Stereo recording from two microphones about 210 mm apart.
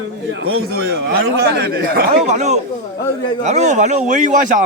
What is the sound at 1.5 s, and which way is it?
A man's voice, 50° right (ahead or behind).